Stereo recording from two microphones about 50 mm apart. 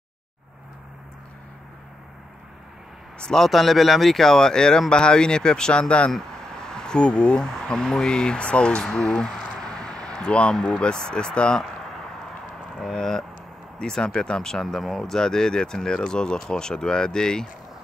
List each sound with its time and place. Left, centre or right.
3.3 s speech: centre
11.6 s a sound: centre
12.9 s speech: centre